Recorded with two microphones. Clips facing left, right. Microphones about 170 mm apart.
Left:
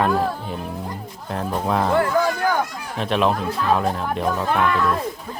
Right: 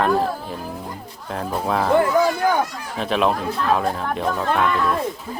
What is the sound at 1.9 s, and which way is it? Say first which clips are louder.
Speech: right 5 dB; 20° right (ahead or behind).